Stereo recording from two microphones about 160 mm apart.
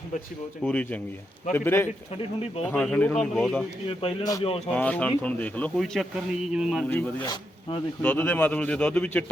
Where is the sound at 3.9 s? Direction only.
35° left (ahead or behind).